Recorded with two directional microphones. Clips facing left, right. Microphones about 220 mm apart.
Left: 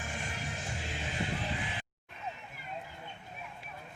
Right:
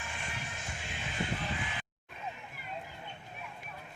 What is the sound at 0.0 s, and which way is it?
Music, 40° left (ahead or behind).